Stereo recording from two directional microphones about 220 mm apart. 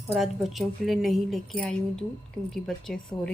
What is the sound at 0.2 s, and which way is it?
A woman's voice, centre (ahead or behind).